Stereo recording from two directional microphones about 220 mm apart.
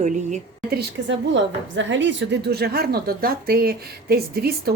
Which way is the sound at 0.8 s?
55° right (ahead or behind).